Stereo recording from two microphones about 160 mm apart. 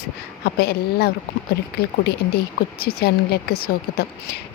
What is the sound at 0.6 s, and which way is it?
Speech, 85° left.